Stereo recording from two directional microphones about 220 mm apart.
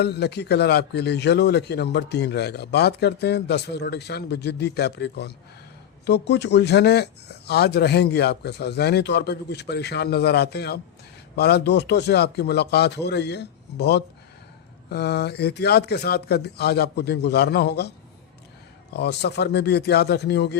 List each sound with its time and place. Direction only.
0.0 s a man's voice: 50° left (ahead or behind)
18.9 s a man's voice: 50° left (ahead or behind)